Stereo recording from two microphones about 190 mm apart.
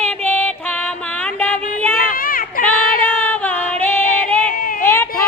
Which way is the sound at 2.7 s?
10° left (ahead or behind).